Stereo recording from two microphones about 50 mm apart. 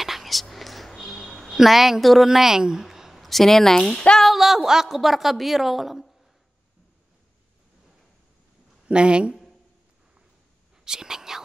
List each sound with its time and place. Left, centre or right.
0.0 s a sound: centre
2.2 s speech: centre
8.8 s speech: right
10.9 s whispering: centre